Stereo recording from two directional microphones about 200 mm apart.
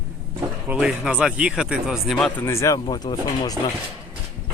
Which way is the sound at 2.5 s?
15° left (ahead or behind).